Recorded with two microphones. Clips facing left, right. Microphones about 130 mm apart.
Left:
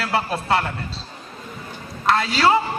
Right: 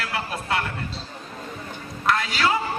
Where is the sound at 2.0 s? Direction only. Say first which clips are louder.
Left 4 dB; 30° left (ahead or behind).